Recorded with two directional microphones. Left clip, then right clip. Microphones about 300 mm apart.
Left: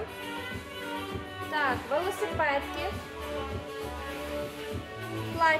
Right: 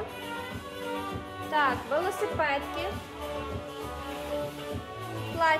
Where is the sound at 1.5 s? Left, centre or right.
Centre.